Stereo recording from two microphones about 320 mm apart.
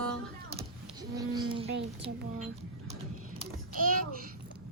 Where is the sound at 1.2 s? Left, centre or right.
Centre.